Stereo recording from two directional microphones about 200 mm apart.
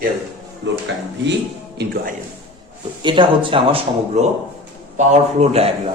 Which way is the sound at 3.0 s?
25° right (ahead or behind).